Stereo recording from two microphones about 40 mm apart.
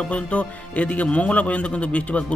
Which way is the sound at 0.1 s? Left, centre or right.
Left.